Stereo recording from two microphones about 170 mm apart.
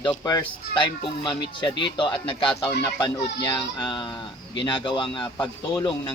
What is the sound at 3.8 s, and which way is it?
Speech, 25° left (ahead or behind).